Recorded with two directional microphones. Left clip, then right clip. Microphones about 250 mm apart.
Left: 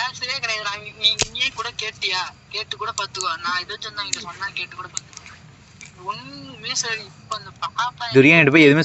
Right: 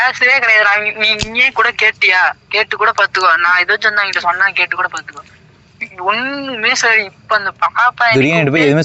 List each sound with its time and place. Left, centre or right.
0.0 s a man's voice: right
6.1 s a man's voice: right
8.2 s speech: centre